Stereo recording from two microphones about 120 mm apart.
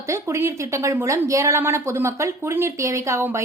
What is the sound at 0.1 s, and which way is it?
A woman's voice, 25° right (ahead or behind).